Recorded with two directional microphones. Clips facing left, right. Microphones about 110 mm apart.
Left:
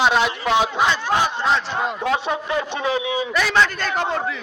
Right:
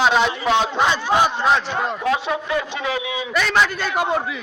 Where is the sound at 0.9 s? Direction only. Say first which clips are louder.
Right 2 dB; 15° right (ahead or behind).